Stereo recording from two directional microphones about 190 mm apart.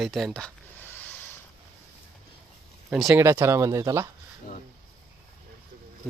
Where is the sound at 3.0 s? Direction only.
15° right (ahead or behind).